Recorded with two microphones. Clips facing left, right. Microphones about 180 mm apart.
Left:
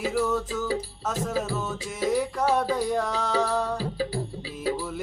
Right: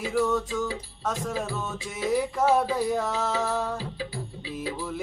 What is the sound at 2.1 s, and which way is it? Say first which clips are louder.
Music: right 3 dB; 5° right (ahead or behind).